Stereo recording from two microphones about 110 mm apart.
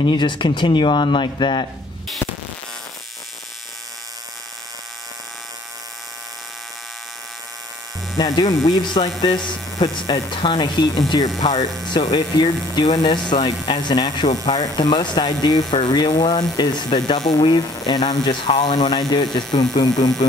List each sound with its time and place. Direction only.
0.0 s speech: 45° left (ahead or behind)
8.2 s speech: 45° left (ahead or behind)